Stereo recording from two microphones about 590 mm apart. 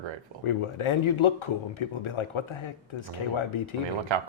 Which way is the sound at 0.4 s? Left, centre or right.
Left.